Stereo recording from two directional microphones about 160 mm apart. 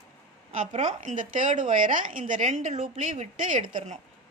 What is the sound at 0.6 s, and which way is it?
A woman's voice, 45° right (ahead or behind).